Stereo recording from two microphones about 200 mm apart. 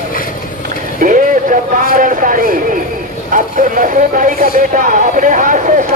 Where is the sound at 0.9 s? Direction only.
45° right (ahead or behind).